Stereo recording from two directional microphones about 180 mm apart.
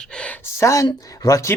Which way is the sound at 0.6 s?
20° left (ahead or behind).